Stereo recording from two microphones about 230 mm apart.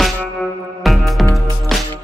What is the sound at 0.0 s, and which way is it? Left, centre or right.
Music, centre.